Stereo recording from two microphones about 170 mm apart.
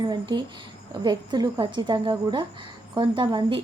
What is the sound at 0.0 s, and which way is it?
A woman's voice, 25° right (ahead or behind).